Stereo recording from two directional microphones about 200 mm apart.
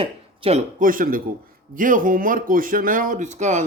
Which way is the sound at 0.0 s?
30° right (ahead or behind).